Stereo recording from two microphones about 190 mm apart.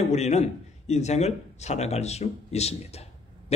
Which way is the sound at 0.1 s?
35° left (ahead or behind).